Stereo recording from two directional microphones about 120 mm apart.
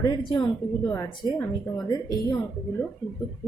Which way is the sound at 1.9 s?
30° left (ahead or behind).